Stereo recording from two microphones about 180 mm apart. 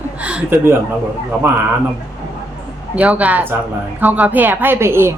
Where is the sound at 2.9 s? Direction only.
5° right (ahead or behind).